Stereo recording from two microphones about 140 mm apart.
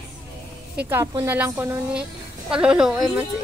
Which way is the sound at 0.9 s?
15° right (ahead or behind).